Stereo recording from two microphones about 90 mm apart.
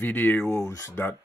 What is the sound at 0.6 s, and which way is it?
Speech, 35° left (ahead or behind).